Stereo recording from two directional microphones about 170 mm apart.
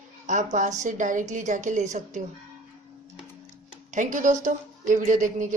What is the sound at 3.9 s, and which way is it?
A woman's voice, 50° right (ahead or behind).